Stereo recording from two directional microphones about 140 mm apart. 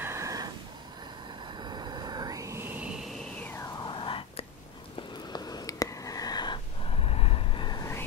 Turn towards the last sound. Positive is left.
turn(degrees=30)  # may be behind; listen again after turning